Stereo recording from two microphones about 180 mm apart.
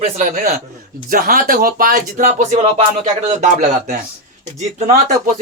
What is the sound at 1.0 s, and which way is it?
Speech, 50° right (ahead or behind).